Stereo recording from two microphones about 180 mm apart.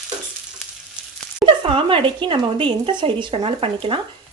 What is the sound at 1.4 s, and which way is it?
Speech, 30° right (ahead or behind).